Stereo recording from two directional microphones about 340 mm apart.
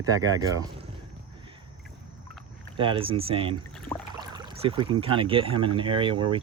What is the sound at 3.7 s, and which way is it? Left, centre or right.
Rowboat, centre.